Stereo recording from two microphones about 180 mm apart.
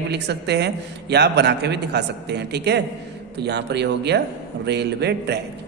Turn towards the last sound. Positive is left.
turn(degrees=-65)  # may be behind; listen again after turning